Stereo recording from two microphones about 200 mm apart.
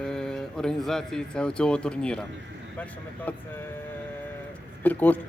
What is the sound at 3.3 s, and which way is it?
Speech, 10° left (ahead or behind).